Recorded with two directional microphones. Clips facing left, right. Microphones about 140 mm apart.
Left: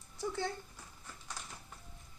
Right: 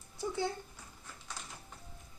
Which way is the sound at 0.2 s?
10° right (ahead or behind).